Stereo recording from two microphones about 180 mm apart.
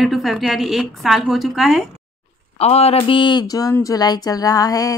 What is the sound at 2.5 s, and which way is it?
Speech, 35° left (ahead or behind).